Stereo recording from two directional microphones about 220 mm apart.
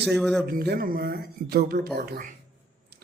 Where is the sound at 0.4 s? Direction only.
45° right (ahead or behind).